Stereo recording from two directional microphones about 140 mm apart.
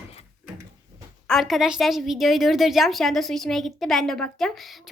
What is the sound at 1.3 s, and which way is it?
A woman's voice, centre (ahead or behind).